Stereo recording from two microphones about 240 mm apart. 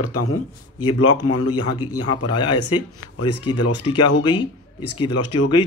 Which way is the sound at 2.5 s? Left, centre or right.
Left.